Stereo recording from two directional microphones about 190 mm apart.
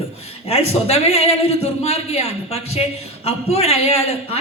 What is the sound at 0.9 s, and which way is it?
A woman's voice, 35° left (ahead or behind).